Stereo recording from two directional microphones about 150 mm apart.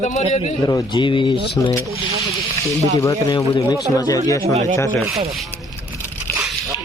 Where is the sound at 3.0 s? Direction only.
20° left (ahead or behind).